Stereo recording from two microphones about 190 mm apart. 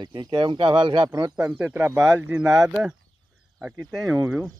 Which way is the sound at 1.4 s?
5° right (ahead or behind).